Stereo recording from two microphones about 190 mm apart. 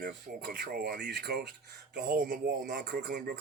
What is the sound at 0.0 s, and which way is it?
Speech, 55° right (ahead or behind).